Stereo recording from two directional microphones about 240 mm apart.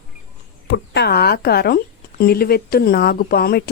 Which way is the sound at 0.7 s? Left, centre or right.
Left.